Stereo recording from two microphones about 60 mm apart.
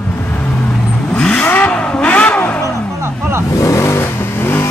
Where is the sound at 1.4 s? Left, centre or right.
Left.